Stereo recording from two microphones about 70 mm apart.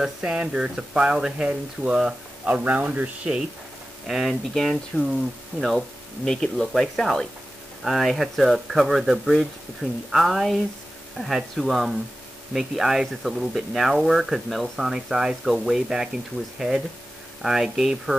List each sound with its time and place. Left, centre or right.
0.0 s speech: centre
2.5 s speech: right
4.1 s speech: centre
6.2 s speech: centre